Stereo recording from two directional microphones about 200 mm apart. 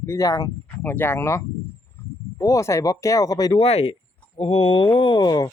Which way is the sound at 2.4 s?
15° left (ahead or behind).